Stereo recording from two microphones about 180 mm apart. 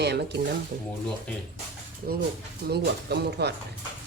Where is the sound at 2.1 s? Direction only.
60° right (ahead or behind).